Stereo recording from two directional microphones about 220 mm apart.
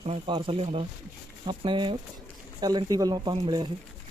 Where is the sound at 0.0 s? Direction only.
25° right (ahead or behind).